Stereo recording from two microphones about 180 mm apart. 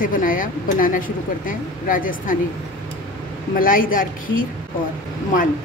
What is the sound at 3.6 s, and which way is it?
Speech, 50° left (ahead or behind).